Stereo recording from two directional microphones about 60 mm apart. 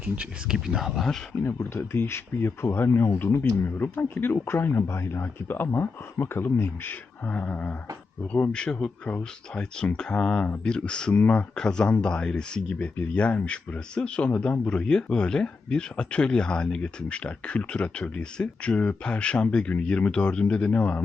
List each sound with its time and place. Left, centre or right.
0.4 s speech: centre
1.5 s speech: left
3.6 s speech: left
7.3 s speech: left
8.5 s speech: centre
11.5 s speech: centre